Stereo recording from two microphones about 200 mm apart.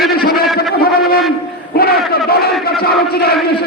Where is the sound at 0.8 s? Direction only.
50° left (ahead or behind).